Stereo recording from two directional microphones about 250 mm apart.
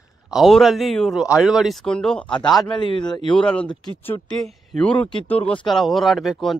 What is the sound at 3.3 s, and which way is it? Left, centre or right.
A man's voice, centre.